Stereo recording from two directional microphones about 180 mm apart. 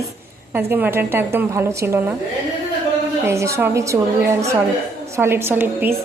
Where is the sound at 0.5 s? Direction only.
10° right (ahead or behind).